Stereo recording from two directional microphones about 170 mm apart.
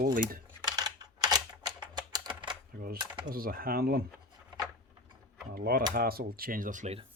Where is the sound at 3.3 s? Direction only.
60° right (ahead or behind).